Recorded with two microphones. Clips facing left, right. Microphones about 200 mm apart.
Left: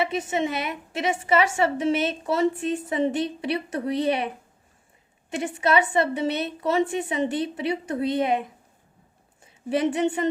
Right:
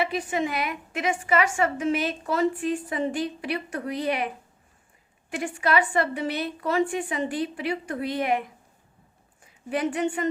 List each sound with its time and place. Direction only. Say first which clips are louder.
0.0 s a woman's voice: left 1 dB; 25° left (ahead or behind)
5.3 s a woman's voice: left 2 dB; 25° left (ahead or behind)